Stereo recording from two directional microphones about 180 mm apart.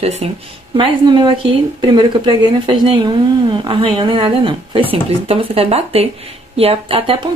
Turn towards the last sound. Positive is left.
turn(degrees=-30)  # may be behind; listen again after turning